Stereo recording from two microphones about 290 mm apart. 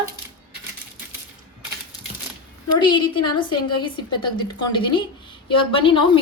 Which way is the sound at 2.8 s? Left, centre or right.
Centre.